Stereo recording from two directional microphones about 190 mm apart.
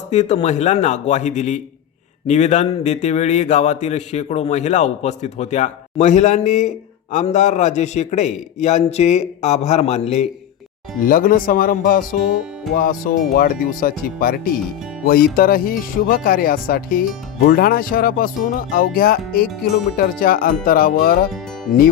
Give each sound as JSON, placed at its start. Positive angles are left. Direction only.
{"t": 0.1, "sound": "speech", "side_deg": 35}
{"t": 11.0, "sound": "speech", "side_deg": 45}